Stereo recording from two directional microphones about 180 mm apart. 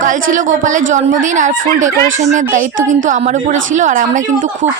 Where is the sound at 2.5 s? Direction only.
45° right (ahead or behind).